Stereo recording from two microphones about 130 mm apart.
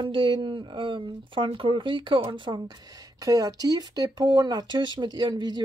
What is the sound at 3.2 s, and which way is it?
Speech, 25° right (ahead or behind).